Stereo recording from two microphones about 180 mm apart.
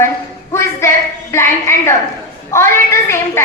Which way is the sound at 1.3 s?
15° left (ahead or behind).